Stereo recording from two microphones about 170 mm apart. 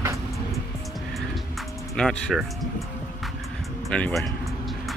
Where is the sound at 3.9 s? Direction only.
5° left (ahead or behind).